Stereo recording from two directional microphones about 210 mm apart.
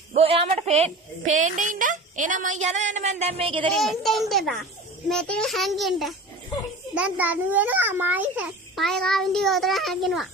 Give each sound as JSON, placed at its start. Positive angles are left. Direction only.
{"t": 0.1, "sound": "a sound", "side_deg": -30}
{"t": 1.3, "sound": "speech", "side_deg": -35}
{"t": 3.8, "sound": "a child's voice", "side_deg": 0}